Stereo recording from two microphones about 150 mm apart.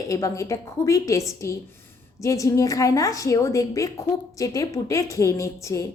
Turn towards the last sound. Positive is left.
turn(degrees=20)  # may be behind; listen again after turning